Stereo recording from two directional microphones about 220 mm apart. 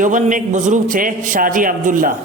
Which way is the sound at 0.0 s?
35° right (ahead or behind).